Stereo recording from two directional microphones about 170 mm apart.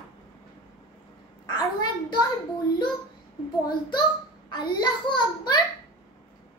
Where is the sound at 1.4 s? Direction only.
25° left (ahead or behind).